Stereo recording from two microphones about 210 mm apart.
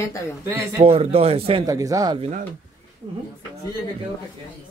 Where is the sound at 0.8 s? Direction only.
25° right (ahead or behind).